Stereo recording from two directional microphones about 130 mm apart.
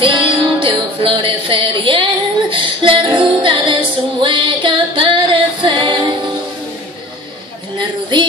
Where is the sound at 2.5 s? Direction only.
40° right (ahead or behind).